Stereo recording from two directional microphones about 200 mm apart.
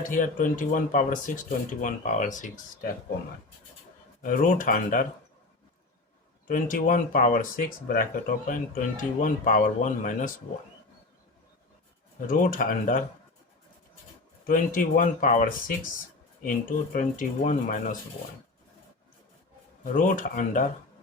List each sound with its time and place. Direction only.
0.0 s speech: 40° left (ahead or behind)
4.2 s speech: 45° left (ahead or behind)
6.5 s speech: 40° left (ahead or behind)
12.3 s speech: 45° left (ahead or behind)
14.4 s speech: 40° left (ahead or behind)
19.8 s speech: 40° left (ahead or behind)